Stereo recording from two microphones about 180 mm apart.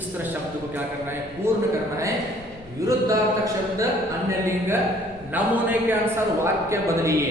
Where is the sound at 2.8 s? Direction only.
20° right (ahead or behind).